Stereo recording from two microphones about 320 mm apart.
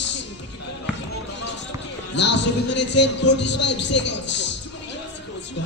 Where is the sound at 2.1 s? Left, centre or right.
Left.